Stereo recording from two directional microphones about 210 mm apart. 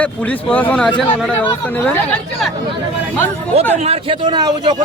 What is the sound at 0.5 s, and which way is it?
Speech, 5° left (ahead or behind).